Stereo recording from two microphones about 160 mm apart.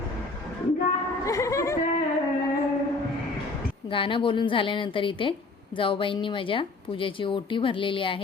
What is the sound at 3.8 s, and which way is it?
A woman's voice, 35° left (ahead or behind).